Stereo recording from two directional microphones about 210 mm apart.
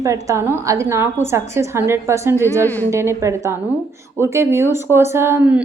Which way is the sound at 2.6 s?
10° left (ahead or behind).